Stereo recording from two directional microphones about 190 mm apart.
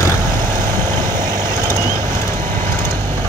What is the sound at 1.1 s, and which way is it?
Vehicle, 20° right (ahead or behind).